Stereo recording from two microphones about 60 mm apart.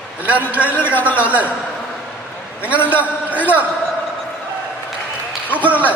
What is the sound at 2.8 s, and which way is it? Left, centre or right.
Speech, right.